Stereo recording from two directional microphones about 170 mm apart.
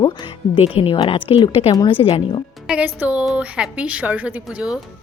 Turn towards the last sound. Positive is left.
turn(degrees=-5)  # may be behind; listen again after turning